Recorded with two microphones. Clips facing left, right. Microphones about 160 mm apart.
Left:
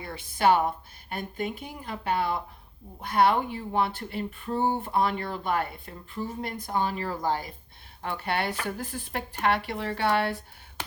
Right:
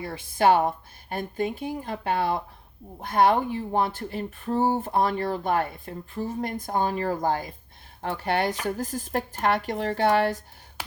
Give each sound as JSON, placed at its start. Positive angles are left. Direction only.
{"t": 0.0, "sound": "speech", "side_deg": -45}